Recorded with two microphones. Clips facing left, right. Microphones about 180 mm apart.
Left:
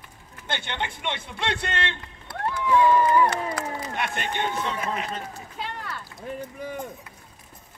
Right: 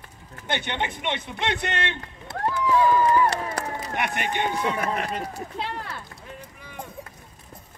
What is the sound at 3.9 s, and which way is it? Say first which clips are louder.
Speech: right 5 dB; 15° right (ahead or behind).